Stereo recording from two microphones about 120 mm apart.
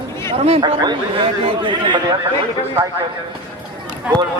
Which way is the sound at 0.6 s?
35° right (ahead or behind).